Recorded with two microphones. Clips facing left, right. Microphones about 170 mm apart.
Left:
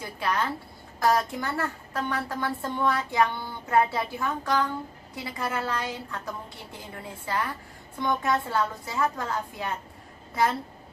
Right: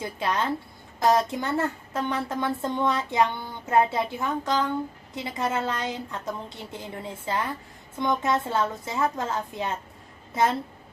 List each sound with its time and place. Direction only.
0.0 s a woman's voice: 20° right (ahead or behind)